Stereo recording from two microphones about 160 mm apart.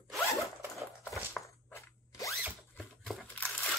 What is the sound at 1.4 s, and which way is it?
Zipper, 20° left (ahead or behind).